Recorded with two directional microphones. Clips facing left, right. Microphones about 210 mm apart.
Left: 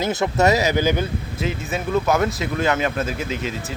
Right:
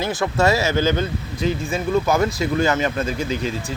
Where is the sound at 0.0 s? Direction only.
20° left (ahead or behind).